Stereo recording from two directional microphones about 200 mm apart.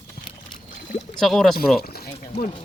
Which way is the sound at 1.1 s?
Centre (ahead or behind).